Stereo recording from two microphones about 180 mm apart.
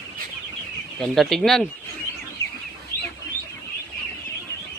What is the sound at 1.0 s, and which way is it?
Speech, centre (ahead or behind).